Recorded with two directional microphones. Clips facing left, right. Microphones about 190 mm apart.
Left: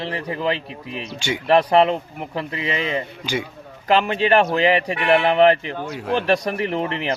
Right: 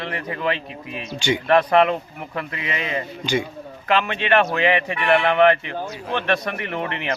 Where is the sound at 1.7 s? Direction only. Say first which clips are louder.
Left 1 dB; 30° left (ahead or behind).